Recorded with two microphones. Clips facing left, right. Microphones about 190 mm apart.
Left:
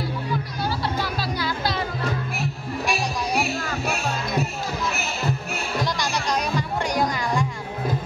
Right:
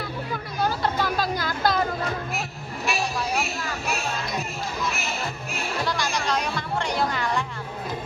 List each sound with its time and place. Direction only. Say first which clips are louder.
0.8 s music: right 2 dB; 50° right (ahead or behind)
5.9 s music: left 1 dB; 15° left (ahead or behind)